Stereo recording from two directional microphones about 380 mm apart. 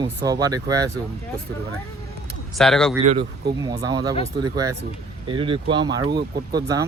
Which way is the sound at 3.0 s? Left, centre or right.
Centre.